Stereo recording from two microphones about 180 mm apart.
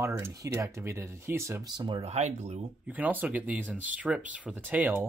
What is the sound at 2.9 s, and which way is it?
Speech, 10° right (ahead or behind).